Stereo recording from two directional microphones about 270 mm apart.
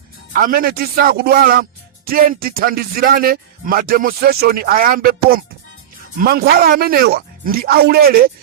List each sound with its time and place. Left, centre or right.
0.3 s speech: right